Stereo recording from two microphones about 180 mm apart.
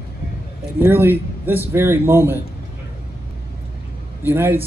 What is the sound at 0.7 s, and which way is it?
A man's voice, 10° right (ahead or behind).